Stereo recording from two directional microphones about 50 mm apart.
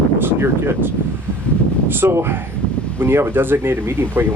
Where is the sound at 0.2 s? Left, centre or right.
Right.